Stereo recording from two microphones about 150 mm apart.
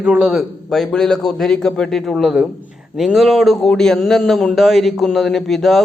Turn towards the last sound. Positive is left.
turn(degrees=0)  # may be behind; listen again after turning